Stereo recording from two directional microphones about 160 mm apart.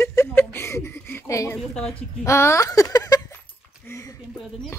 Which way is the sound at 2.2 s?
15° left (ahead or behind).